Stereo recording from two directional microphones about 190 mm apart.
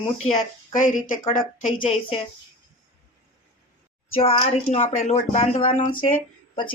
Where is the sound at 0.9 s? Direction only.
45° left (ahead or behind).